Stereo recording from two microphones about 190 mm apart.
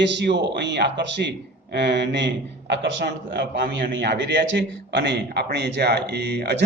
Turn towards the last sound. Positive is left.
turn(degrees=-60)  # may be behind; listen again after turning